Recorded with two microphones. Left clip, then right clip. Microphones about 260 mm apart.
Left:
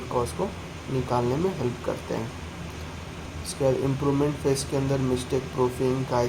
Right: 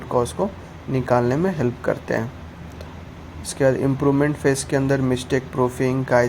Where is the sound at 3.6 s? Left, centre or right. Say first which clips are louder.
Right 6 dB; right.